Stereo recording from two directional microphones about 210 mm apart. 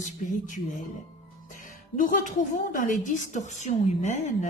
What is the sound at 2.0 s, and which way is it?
A woman's voice, 40° left (ahead or behind).